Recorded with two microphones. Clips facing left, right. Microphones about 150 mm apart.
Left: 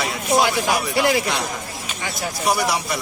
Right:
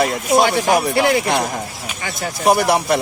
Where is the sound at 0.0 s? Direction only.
45° right (ahead or behind).